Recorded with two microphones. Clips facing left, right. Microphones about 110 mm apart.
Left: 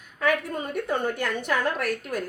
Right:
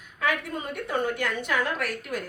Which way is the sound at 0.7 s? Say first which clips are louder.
Left 1 dB; 45° left (ahead or behind).